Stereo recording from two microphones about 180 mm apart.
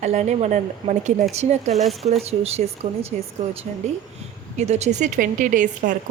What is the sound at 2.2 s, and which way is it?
A woman's voice, 35° right (ahead or behind).